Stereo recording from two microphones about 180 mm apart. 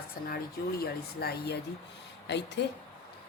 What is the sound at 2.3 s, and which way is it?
Speech, 80° left.